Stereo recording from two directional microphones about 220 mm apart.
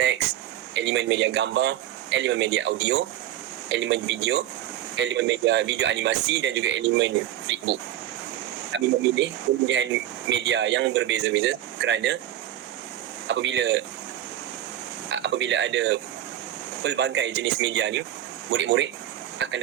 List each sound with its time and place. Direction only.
0.7 s speech: 55° right (ahead or behind)
13.2 s speech: 55° right (ahead or behind)
15.1 s creak: 55° right (ahead or behind)
16.8 s speech: 50° right (ahead or behind)
19.4 s vehicle: 55° right (ahead or behind)